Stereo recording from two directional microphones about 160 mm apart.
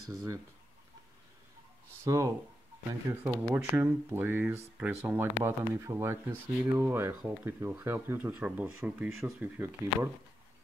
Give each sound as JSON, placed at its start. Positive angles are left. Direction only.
{"t": 0.1, "sound": "speech", "side_deg": -20}
{"t": 2.0, "sound": "speech", "side_deg": -20}